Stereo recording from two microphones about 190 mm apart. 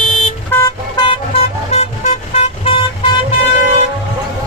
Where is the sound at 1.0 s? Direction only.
30° left (ahead or behind).